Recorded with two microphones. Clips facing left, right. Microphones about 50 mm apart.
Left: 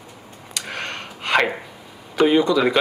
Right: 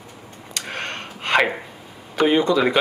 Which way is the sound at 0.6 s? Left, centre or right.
Right.